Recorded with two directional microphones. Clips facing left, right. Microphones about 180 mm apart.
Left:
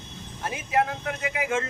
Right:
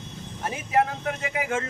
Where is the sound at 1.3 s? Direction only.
45° right (ahead or behind).